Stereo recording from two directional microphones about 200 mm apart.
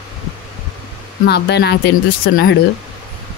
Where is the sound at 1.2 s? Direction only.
55° left (ahead or behind).